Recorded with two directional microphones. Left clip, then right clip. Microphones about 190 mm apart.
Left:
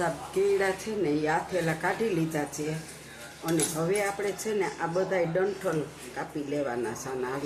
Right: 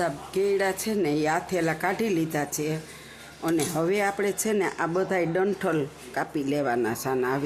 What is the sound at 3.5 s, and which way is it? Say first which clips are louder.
Speech: right 2 dB; 60° right (ahead or behind).